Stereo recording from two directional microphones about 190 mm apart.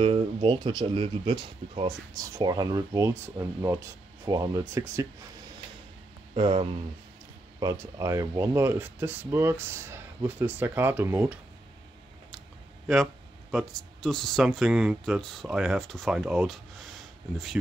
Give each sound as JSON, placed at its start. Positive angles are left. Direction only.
{"t": 0.0, "sound": "speech", "side_deg": -30}
{"t": 6.3, "sound": "speech", "side_deg": -30}
{"t": 7.6, "sound": "speech", "side_deg": -15}
{"t": 12.8, "sound": "speech", "side_deg": 0}